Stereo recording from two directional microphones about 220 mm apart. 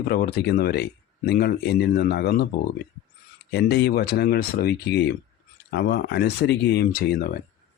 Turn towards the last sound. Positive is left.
turn(degrees=40)  # may be behind; listen again after turning